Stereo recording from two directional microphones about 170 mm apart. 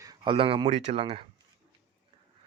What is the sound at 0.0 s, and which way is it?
Speech, 25° right (ahead or behind).